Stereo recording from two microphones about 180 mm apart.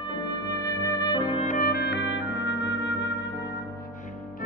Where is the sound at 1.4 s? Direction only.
50° left (ahead or behind); by 3.1 s 90° left.